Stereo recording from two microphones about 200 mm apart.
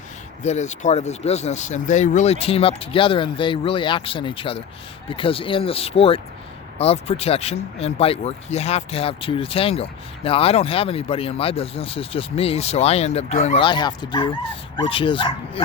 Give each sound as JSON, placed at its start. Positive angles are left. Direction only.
{"t": 0.4, "sound": "speech", "side_deg": 35}